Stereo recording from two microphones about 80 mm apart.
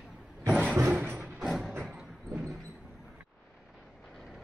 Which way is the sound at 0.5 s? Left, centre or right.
Centre.